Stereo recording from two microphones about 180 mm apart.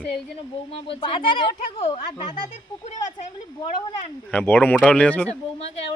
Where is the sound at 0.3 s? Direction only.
30° left (ahead or behind).